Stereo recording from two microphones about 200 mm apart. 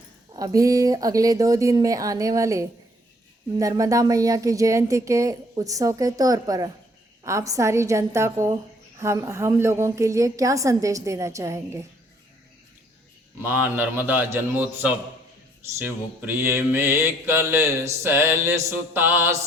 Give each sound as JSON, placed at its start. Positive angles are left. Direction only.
{"t": 0.3, "sound": "speech", "side_deg": -15}
{"t": 13.4, "sound": "speech", "side_deg": -10}